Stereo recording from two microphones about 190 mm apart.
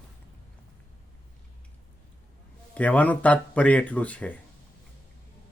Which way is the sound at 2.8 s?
10° left (ahead or behind).